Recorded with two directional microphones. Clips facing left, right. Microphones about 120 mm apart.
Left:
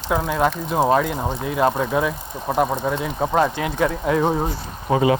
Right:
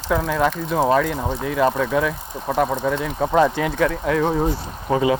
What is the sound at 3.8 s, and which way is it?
Speech, 25° left (ahead or behind).